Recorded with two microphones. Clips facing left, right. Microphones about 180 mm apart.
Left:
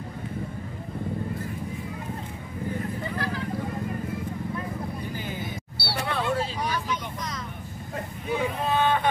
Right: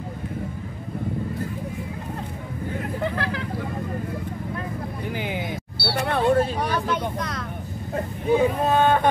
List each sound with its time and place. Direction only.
3.0 s vehicle: 75° right (ahead or behind)
5.1 s a sound: 70° right (ahead or behind)
8.4 s vehicle: 45° right (ahead or behind)